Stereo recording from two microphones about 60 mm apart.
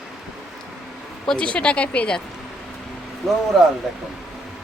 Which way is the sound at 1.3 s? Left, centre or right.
Centre.